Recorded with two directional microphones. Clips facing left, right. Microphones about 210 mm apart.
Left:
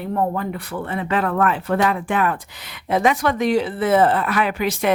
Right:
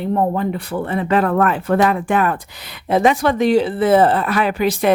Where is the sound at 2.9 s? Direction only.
30° right (ahead or behind).